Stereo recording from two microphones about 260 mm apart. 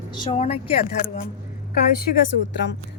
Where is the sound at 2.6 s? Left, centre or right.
Left.